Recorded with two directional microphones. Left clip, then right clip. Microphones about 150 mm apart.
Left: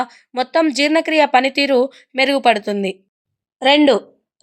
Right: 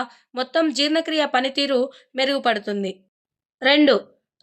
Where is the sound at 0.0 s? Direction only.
35° left (ahead or behind).